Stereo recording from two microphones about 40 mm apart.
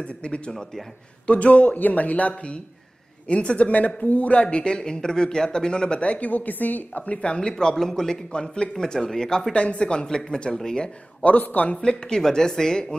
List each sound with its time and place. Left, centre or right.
0.0 s speech: left
4.4 s speech: left
6.9 s speech: left
7.2 s speech: centre
9.5 s speech: left
11.2 s speech: left
11.7 s speech: left